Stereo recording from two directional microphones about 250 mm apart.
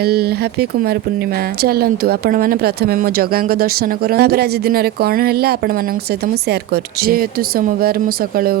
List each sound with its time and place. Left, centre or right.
0.0 s a woman's voice: right
1.6 s a woman's voice: right
7.0 s a woman's voice: right